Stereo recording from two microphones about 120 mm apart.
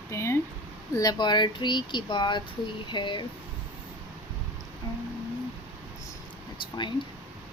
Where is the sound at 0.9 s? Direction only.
35° left (ahead or behind).